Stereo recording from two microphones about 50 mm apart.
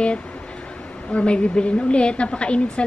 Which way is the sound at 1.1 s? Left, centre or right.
Left.